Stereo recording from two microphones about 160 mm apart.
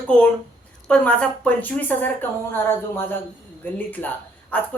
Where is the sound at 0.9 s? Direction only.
5° left (ahead or behind).